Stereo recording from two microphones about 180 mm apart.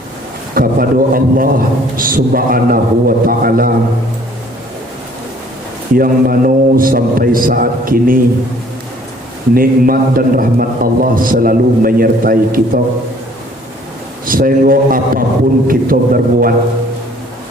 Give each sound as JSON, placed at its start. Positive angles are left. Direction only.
{"t": 0.5, "sound": "a man's voice", "side_deg": -55}
{"t": 5.9, "sound": "a man's voice", "side_deg": -50}
{"t": 9.6, "sound": "a man's voice", "side_deg": -50}
{"t": 14.3, "sound": "a man's voice", "side_deg": -50}